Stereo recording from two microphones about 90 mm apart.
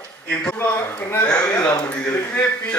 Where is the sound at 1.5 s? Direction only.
15° left (ahead or behind).